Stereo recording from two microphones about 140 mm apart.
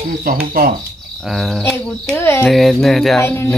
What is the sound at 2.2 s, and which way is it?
Speech, 15° left (ahead or behind).